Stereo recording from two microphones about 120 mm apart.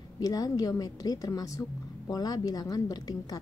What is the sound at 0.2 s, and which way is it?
A woman's voice, 30° left (ahead or behind).